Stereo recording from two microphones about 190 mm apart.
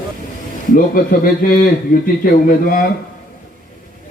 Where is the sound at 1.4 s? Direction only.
45° left (ahead or behind).